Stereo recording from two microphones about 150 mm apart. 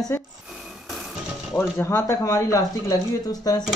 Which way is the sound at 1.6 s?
20° left (ahead or behind).